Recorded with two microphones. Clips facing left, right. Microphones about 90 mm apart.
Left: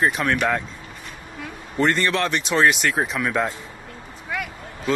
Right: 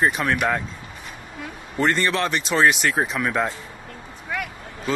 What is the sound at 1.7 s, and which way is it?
Speech, centre (ahead or behind).